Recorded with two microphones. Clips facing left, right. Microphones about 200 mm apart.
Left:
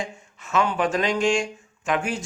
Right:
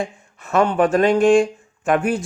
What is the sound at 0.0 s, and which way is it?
Speech, 55° right (ahead or behind).